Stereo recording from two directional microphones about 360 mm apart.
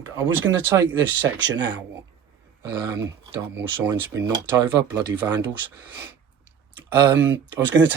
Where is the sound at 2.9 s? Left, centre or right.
Centre.